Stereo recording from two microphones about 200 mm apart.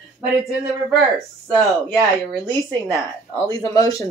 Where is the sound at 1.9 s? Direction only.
20° right (ahead or behind).